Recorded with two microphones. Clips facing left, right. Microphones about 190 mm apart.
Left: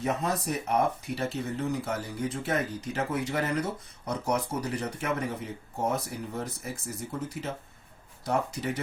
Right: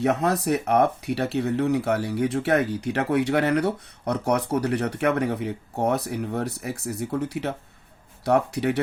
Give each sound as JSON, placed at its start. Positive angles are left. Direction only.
{"t": 0.0, "sound": "speech", "side_deg": -70}